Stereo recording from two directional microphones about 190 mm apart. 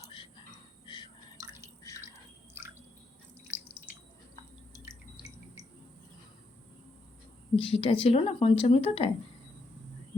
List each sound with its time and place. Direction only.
0.0 s a sound: 25° left (ahead or behind)
0.9 s drip: 25° left (ahead or behind)
2.6 s drip: 10° right (ahead or behind)
7.5 s a woman's voice: 30° left (ahead or behind)